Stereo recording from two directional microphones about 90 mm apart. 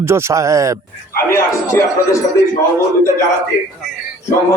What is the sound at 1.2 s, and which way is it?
Speech, 30° left (ahead or behind).